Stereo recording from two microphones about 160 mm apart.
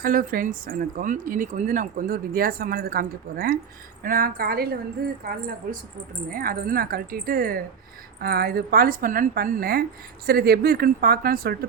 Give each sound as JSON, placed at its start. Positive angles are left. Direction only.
{"t": 0.0, "sound": "a woman's voice", "side_deg": -60}